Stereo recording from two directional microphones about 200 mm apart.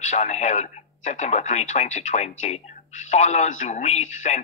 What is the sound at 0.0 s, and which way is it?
Speech, 35° left (ahead or behind).